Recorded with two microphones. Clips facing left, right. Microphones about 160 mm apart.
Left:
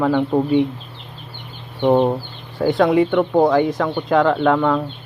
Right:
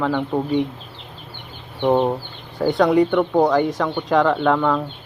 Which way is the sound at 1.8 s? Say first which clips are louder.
Left 2 dB; 5° left (ahead or behind).